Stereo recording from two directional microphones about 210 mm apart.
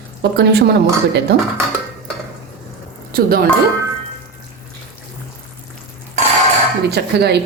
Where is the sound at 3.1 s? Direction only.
45° right (ahead or behind).